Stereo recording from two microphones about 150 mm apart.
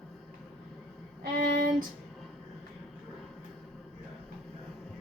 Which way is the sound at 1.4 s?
65° right (ahead or behind).